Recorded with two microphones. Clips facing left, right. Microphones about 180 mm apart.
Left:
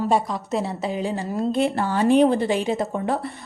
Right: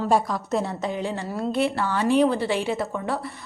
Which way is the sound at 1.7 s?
45° left (ahead or behind).